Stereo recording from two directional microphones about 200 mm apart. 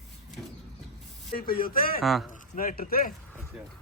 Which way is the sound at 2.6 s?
45° left (ahead or behind).